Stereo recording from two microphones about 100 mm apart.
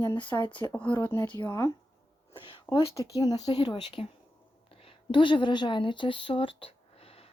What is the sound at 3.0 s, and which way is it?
A woman's voice, 35° left (ahead or behind).